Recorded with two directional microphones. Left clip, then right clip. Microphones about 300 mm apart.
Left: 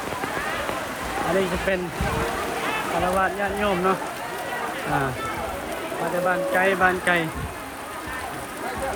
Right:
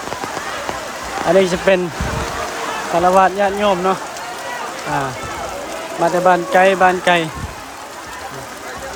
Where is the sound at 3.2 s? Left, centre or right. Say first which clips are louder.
Right 9 dB; centre.